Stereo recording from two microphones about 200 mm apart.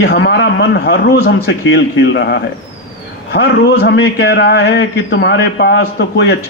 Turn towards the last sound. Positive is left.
turn(degrees=60)  # may be behind; listen again after turning